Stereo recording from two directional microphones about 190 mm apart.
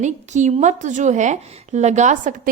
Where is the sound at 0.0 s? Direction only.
40° right (ahead or behind).